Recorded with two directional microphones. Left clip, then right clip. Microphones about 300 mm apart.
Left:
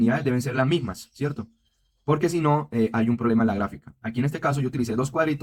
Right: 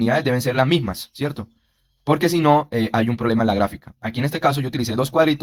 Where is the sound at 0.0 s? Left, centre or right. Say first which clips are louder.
Right 5 dB; right.